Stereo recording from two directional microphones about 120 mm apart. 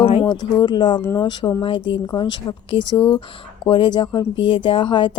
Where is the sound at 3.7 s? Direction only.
40° left (ahead or behind).